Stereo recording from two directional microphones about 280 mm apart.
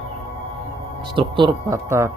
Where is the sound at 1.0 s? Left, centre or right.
Centre.